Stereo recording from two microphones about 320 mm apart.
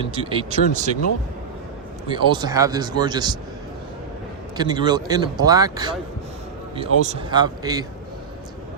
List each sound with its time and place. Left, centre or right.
0.1 s speech: centre
2.1 s speech: centre
4.5 s speech: centre